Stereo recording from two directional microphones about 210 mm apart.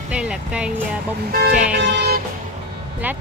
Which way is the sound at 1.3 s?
45° right (ahead or behind).